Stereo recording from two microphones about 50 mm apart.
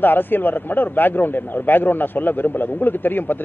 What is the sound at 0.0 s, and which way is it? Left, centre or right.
A man's voice, left.